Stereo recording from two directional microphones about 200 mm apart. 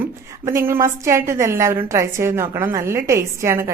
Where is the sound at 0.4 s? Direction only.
15° right (ahead or behind).